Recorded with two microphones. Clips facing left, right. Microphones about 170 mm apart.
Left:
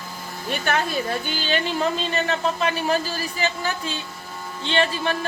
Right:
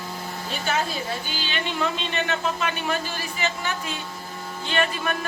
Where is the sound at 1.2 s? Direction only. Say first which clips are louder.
Left 5 dB; 45° left (ahead or behind).